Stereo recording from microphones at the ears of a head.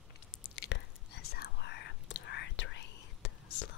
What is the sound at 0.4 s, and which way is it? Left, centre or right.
Whispering, left.